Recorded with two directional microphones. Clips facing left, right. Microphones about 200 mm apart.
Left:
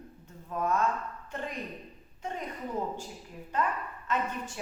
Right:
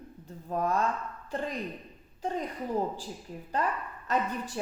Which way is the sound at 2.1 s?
35° right (ahead or behind).